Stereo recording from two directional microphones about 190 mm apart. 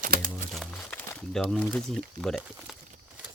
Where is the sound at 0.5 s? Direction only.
Centre (ahead or behind).